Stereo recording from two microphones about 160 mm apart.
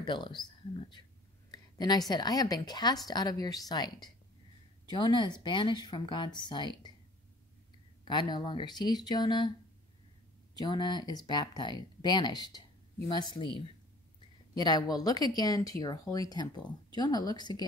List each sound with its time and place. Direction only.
0.0 s a woman's voice: 30° left (ahead or behind)
8.0 s speech: 30° left (ahead or behind)
10.6 s speech: 25° left (ahead or behind)
14.5 s speech: 25° left (ahead or behind)